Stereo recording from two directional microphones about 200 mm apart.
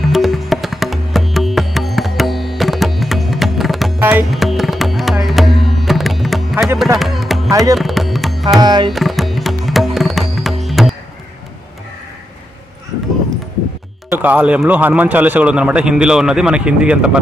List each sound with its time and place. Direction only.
0.1 s music: centre (ahead or behind)
4.0 s tabla: 5° right (ahead or behind)
7.0 s music: centre (ahead or behind)
7.5 s tabla: 15° right (ahead or behind)
7.8 s music: centre (ahead or behind)
8.5 s music: 20° right (ahead or behind)
8.9 s music: centre (ahead or behind)
14.1 s speech: 10° right (ahead or behind)